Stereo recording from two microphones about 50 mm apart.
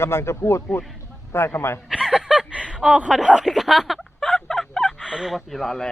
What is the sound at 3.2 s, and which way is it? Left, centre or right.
Speech, centre.